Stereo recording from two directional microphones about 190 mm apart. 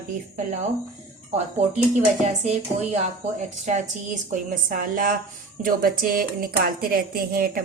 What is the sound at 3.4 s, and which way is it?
Speech, 40° right (ahead or behind).